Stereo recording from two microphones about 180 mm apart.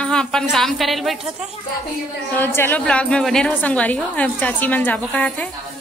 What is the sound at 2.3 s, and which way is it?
A woman's voice, 10° left (ahead or behind).